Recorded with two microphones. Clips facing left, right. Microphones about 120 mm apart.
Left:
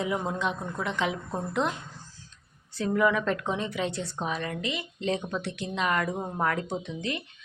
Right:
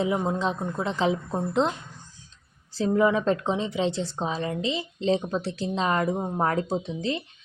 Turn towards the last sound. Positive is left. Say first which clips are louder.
# right 4 dB
turn(degrees=-30)  # may be behind; listen again after turning